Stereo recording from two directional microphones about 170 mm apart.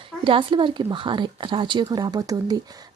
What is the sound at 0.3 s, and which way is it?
Speech, 30° right (ahead or behind).